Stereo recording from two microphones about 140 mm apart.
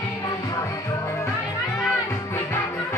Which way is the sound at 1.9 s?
15° left (ahead or behind).